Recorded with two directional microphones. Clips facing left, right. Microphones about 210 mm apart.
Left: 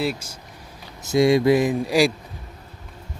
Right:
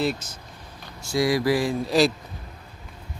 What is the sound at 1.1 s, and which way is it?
Mantra, 25° left (ahead or behind).